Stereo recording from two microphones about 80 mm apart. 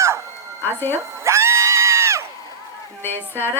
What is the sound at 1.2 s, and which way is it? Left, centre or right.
Crowd, right.